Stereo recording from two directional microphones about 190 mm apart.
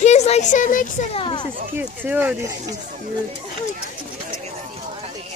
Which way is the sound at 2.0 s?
10° right (ahead or behind).